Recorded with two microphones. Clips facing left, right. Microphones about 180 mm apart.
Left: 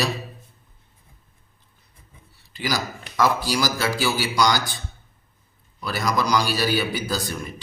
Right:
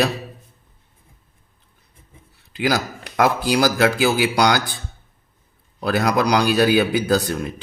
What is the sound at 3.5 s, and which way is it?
Speech, 60° right (ahead or behind).